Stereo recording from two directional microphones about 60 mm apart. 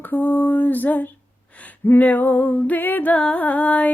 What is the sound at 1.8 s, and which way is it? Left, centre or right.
Music, left.